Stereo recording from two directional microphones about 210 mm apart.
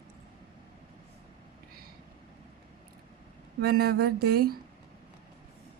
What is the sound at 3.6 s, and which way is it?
Speech, 50° right (ahead or behind).